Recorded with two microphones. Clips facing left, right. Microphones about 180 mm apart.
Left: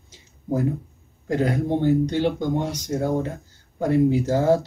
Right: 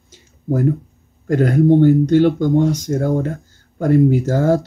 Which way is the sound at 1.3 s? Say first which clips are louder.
Right 9 dB; 55° right (ahead or behind).